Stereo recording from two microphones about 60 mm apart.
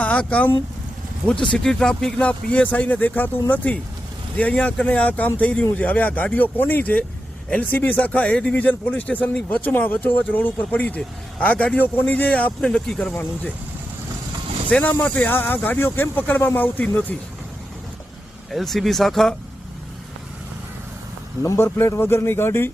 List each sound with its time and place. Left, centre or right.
0.0 s speech: left
14.7 s speech: left
18.5 s speech: centre
21.4 s speech: left